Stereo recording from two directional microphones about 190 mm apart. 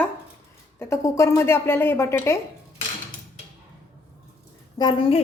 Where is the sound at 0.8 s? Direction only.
15° left (ahead or behind).